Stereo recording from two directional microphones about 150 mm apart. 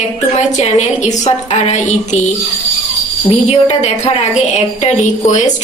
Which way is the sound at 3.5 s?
45° left (ahead or behind).